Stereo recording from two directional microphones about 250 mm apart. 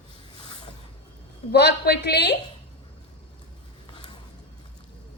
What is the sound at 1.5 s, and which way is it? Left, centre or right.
Speech, left.